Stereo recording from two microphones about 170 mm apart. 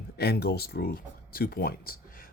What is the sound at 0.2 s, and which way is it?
Speech, 70° left (ahead or behind).